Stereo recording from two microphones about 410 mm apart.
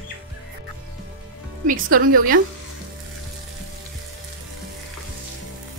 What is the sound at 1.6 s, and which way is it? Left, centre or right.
Speech, centre.